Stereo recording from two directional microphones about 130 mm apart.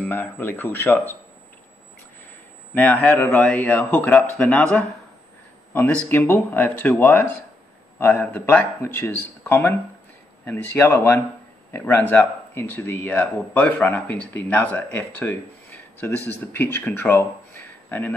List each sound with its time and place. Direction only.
0.0 s speech: 15° left (ahead or behind)
2.7 s speech: 10° left (ahead or behind)